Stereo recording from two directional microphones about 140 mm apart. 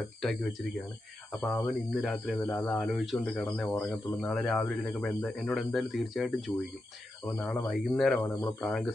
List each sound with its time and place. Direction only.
0.2 s speech: centre (ahead or behind)
2.4 s speech: 25° left (ahead or behind)
2.7 s speech: centre (ahead or behind)